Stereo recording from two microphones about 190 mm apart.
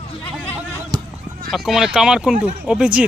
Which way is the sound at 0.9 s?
20° right (ahead or behind).